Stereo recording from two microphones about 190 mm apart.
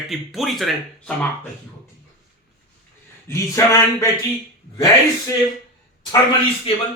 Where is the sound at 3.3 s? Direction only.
15° left (ahead or behind).